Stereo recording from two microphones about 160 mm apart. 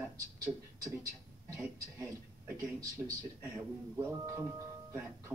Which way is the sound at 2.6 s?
20° right (ahead or behind).